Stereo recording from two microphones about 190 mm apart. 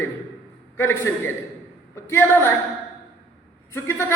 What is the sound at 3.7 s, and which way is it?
Speech, 15° left (ahead or behind).